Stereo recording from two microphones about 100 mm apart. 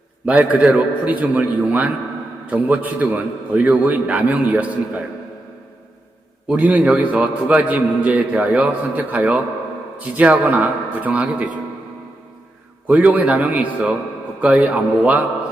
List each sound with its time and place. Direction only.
0.3 s a man's voice: 15° right (ahead or behind)
6.5 s a man's voice: 15° right (ahead or behind)
12.9 s a man's voice: 15° right (ahead or behind)